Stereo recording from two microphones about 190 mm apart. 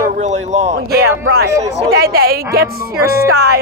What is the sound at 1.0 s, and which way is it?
Speech, 55° right (ahead or behind).